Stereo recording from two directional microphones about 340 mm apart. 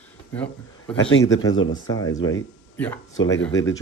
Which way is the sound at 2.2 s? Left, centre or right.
Centre.